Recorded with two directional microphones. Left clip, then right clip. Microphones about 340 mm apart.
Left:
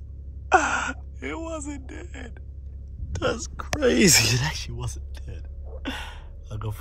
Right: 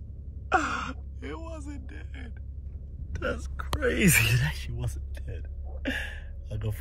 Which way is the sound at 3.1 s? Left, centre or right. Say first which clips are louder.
Left 6 dB; centre.